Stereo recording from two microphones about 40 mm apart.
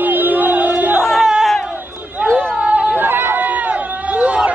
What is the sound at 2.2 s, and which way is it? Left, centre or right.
Chatter, left.